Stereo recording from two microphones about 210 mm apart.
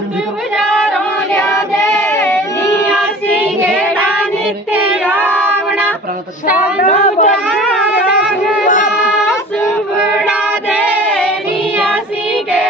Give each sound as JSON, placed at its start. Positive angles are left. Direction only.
{"t": 0.5, "sound": "music", "side_deg": 0}
{"t": 1.3, "sound": "child singing", "side_deg": 10}
{"t": 2.8, "sound": "child singing", "side_deg": -5}
{"t": 3.9, "sound": "child singing", "side_deg": 5}
{"t": 5.4, "sound": "a sound", "side_deg": -10}
{"t": 6.8, "sound": "chatter", "side_deg": 35}
{"t": 7.4, "sound": "a sound", "side_deg": -5}
{"t": 8.6, "sound": "child singing", "side_deg": 35}
{"t": 9.0, "sound": "music", "side_deg": -5}